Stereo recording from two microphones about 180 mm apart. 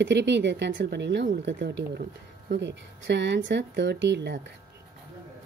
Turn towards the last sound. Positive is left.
turn(degrees=-70)  # may be behind; listen again after turning